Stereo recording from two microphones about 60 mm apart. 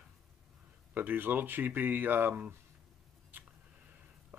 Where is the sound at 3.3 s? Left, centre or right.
Right.